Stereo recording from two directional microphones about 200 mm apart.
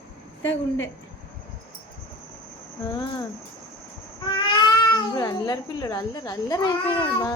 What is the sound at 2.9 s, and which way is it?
Speech, 20° left (ahead or behind).